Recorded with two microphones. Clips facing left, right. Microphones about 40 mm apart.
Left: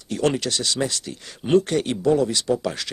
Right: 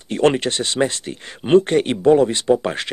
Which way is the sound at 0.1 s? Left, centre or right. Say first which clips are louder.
Right 5 dB; right.